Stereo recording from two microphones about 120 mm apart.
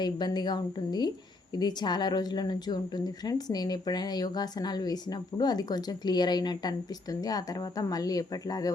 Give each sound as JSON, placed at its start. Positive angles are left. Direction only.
{"t": 0.0, "sound": "a woman's voice", "side_deg": 35}